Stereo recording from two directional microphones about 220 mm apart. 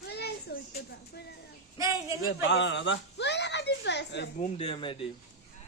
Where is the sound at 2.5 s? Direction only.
55° left (ahead or behind).